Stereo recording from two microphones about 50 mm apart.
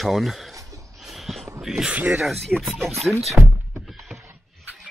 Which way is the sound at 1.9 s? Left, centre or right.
Right.